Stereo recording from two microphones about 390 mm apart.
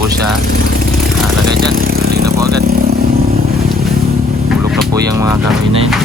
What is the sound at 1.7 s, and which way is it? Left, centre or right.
Vehicle, right.